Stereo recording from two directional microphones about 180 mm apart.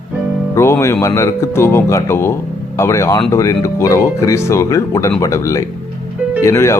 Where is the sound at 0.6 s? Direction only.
15° left (ahead or behind).